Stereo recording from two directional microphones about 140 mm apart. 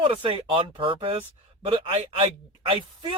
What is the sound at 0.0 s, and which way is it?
Speech, 40° right (ahead or behind).